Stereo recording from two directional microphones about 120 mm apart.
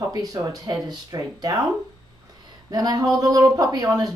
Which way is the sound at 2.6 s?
35° right (ahead or behind).